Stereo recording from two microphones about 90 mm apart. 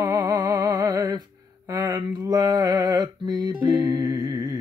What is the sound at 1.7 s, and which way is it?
Mantra, 40° right (ahead or behind).